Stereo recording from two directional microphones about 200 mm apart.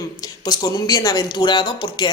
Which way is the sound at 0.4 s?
20° left (ahead or behind).